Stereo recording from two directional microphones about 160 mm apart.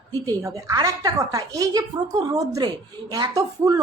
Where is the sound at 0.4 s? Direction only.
20° right (ahead or behind).